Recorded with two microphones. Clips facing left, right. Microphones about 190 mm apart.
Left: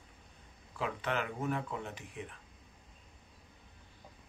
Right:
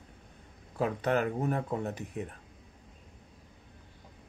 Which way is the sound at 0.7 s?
40° right (ahead or behind).